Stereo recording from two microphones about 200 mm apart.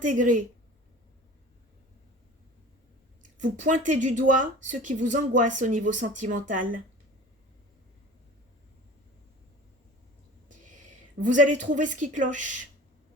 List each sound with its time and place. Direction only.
0.0 s speech: 40° right (ahead or behind)
3.6 s speech: 40° right (ahead or behind)
11.2 s speech: 40° right (ahead or behind)